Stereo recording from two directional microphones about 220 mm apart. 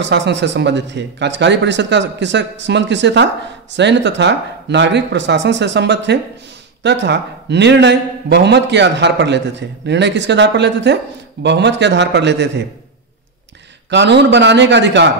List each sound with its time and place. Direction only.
0.0 s a man's voice: 55° right (ahead or behind)
13.8 s a man's voice: 50° right (ahead or behind)